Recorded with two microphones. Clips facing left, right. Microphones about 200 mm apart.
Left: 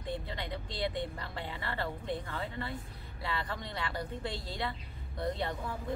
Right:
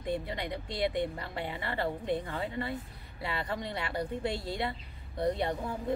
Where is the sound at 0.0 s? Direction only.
15° right (ahead or behind).